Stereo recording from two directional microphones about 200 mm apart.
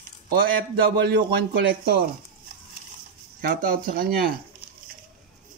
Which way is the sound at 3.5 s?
45° right (ahead or behind).